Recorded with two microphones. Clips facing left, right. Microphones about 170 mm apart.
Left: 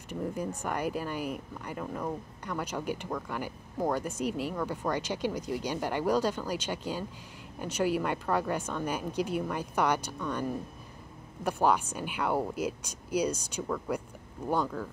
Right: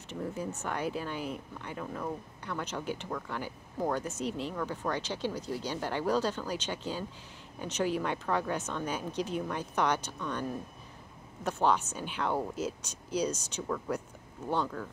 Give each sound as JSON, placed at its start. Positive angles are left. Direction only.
{"t": 0.1, "sound": "speech", "side_deg": 10}